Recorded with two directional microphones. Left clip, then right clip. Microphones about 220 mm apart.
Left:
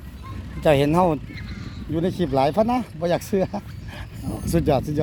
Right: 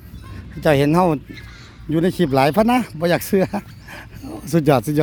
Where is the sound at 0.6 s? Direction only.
20° right (ahead or behind).